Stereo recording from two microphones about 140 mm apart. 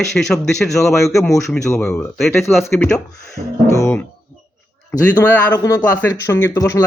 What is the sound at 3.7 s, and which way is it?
Speech, 20° left (ahead or behind).